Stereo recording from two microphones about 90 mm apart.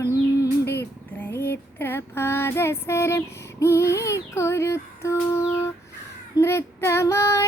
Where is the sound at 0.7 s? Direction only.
25° left (ahead or behind).